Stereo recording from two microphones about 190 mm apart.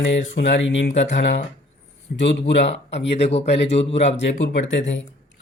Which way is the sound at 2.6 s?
70° left (ahead or behind).